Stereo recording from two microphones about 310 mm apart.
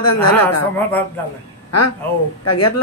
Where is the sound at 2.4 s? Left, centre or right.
Left.